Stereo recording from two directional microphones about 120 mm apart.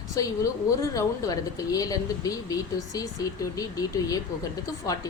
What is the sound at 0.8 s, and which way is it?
A woman's voice, 30° left (ahead or behind).